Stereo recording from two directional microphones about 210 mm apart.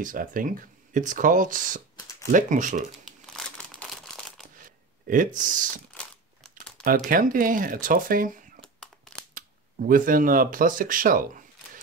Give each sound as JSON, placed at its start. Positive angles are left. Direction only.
{"t": 0.0, "sound": "speech", "side_deg": -40}
{"t": 3.4, "sound": "crumpling", "side_deg": 0}
{"t": 4.6, "sound": "a sound", "side_deg": -40}
{"t": 7.1, "sound": "speech", "side_deg": -40}
{"t": 9.3, "sound": "speech", "side_deg": -40}